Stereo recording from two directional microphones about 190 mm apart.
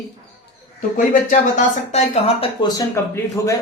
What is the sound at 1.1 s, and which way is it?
Speech, 45° left (ahead or behind).